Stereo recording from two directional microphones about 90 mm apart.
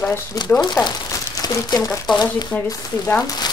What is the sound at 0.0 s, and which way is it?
Speech, 35° left (ahead or behind).